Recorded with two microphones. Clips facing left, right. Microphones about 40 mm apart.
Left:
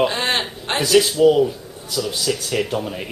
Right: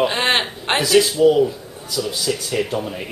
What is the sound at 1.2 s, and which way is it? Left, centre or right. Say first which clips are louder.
Speech: even; centre.